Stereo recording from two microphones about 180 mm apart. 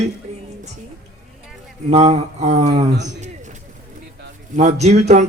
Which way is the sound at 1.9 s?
35° right (ahead or behind).